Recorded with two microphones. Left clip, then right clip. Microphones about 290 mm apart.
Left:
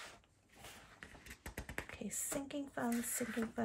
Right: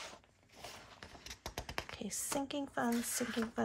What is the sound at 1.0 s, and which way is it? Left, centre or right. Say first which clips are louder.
Clip-clop: right 4 dB; right.